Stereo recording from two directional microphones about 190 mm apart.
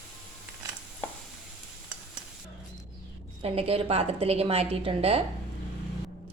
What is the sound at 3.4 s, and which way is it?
A woman's voice, 30° right (ahead or behind).